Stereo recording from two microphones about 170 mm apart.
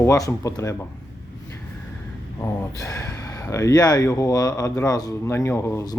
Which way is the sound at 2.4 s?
15° left (ahead or behind).